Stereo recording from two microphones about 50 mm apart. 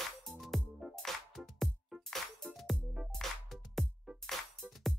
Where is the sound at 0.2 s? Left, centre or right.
Centre.